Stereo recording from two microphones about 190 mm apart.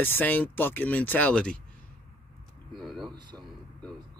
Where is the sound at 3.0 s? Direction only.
25° right (ahead or behind).